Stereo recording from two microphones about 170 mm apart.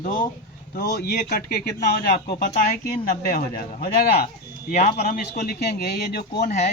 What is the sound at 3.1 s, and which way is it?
Speech, 50° left (ahead or behind).